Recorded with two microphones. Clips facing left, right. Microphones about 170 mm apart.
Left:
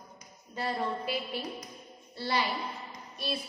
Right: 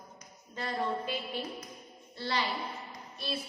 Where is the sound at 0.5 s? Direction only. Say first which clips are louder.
Left 1 dB; 10° left (ahead or behind).